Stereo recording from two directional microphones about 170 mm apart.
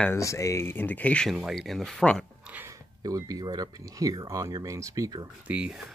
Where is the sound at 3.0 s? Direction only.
20° right (ahead or behind).